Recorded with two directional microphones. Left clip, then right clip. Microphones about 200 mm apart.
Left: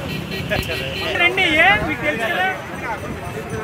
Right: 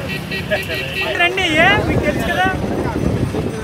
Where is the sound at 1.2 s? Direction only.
40° right (ahead or behind).